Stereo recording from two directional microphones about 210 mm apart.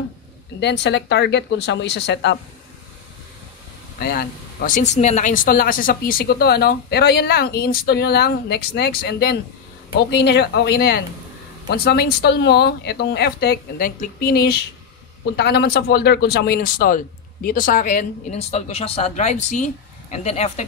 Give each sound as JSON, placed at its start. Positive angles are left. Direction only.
{"t": 0.6, "sound": "speech", "side_deg": 55}
{"t": 4.0, "sound": "speech", "side_deg": 45}